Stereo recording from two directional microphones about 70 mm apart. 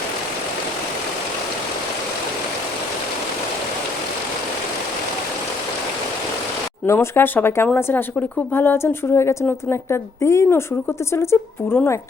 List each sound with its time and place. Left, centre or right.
6.8 s a woman's voice: left